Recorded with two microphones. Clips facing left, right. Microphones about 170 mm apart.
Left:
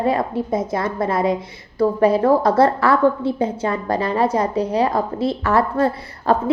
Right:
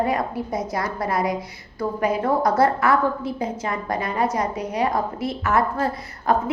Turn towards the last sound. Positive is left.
turn(degrees=30)  # may be behind; listen again after turning